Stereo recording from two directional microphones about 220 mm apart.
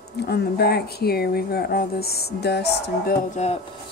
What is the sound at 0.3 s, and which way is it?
Speech, 45° left (ahead or behind).